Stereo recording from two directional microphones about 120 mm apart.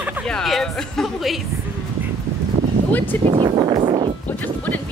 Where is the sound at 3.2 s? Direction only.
45° right (ahead or behind).